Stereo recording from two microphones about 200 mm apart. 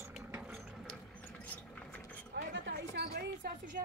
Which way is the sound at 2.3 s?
65° right (ahead or behind).